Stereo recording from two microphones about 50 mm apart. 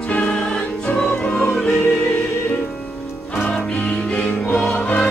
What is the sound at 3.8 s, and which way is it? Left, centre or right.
Music, left.